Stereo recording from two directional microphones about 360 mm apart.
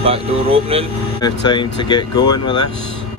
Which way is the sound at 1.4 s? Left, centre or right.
Centre.